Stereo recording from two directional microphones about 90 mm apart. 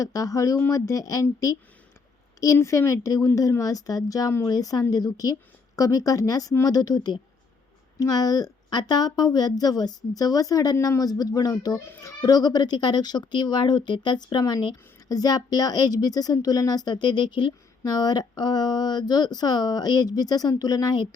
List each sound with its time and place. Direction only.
0.0 s speech: 40° left (ahead or behind)